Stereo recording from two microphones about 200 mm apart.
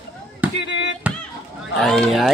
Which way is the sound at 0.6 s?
60° left (ahead or behind).